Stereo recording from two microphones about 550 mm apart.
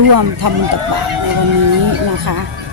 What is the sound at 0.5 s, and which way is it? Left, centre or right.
Speech, right.